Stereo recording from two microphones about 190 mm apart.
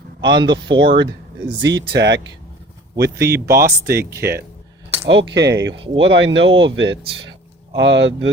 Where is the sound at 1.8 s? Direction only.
65° right (ahead or behind).